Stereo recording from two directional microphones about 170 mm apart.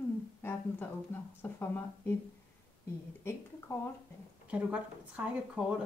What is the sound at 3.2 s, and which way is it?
Speech, 15° left (ahead or behind).